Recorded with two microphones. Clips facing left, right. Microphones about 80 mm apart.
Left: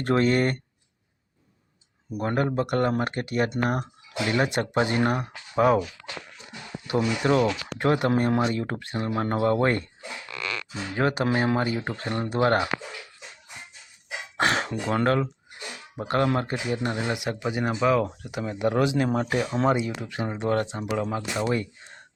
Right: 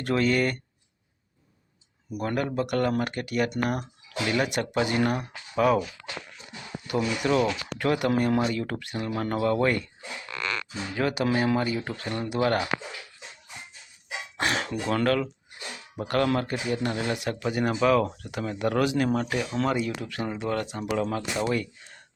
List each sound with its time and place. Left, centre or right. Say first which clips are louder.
0.0 s speech: left 2 dB; left
2.0 s speech: left 3 dB; left
6.9 s speech: left 2 dB; left
10.9 s speech: left 1 dB; left
14.3 s speech: left 3 dB; left
20.4 s speech: left 5 dB; left
20.8 s speech: even; centre